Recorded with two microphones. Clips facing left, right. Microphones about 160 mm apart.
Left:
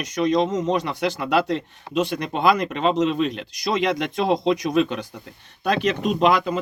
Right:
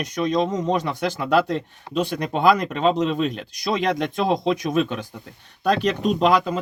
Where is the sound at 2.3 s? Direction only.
40° right (ahead or behind).